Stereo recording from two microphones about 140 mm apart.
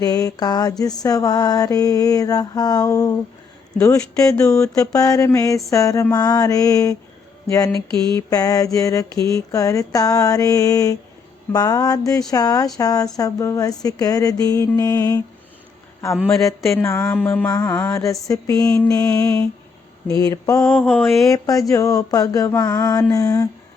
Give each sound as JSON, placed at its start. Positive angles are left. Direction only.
{"t": 0.0, "sound": "mantra", "side_deg": 25}
{"t": 4.4, "sound": "mantra", "side_deg": 20}
{"t": 7.4, "sound": "speech", "side_deg": 25}
{"t": 7.7, "sound": "a sound", "side_deg": -35}
{"t": 8.3, "sound": "mantra", "side_deg": 25}
{"t": 16.7, "sound": "mantra", "side_deg": 20}
{"t": 20.8, "sound": "mantra", "side_deg": 0}
{"t": 21.2, "sound": "mantra", "side_deg": 25}